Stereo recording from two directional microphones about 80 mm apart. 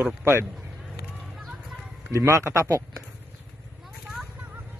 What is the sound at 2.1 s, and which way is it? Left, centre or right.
Speech, right.